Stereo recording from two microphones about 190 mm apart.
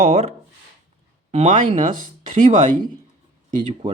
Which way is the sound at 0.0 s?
35° right (ahead or behind).